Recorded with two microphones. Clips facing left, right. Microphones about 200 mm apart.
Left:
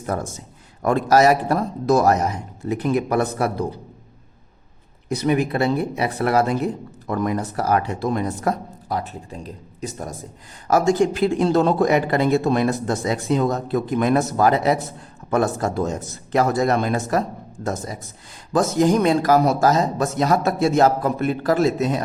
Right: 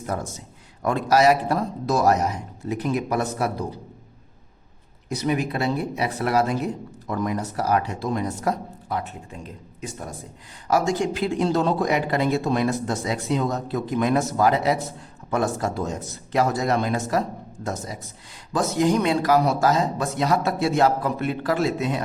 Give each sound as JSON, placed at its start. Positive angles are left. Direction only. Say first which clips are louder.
{"t": 0.1, "sound": "speech", "louder": "left 3 dB", "side_deg": 50}
{"t": 5.0, "sound": "speech", "louder": "left 4 dB", "side_deg": 60}
{"t": 8.9, "sound": "speech", "louder": "left 3 dB", "side_deg": 35}